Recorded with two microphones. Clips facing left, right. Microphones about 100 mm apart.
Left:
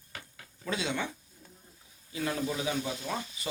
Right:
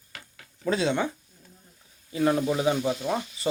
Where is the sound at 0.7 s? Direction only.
35° right (ahead or behind).